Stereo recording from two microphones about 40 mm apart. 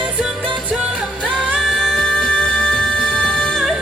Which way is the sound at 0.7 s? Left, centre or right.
Centre.